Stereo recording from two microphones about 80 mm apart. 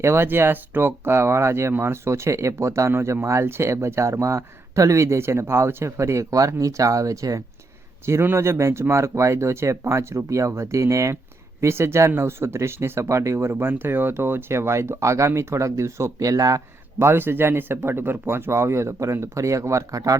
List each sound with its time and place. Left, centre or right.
0.0 s speech: right
8.0 s speech: right
17.1 s speech: right